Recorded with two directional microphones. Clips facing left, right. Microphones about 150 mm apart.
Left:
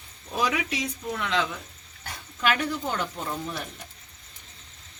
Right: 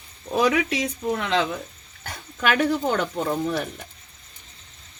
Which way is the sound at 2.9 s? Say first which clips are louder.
Right 7 dB; 65° right (ahead or behind).